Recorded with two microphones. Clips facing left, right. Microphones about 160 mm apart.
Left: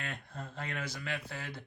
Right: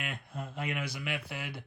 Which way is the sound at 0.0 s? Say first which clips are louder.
Right 2 dB; 10° right (ahead or behind).